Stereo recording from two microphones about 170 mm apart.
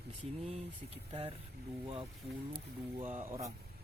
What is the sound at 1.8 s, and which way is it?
Speech, 30° right (ahead or behind).